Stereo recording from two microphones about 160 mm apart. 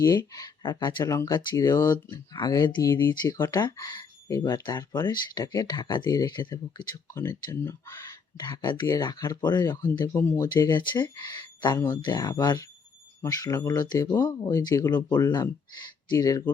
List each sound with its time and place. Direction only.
0.0 s speech: 25° left (ahead or behind)
8.4 s speech: 25° left (ahead or behind)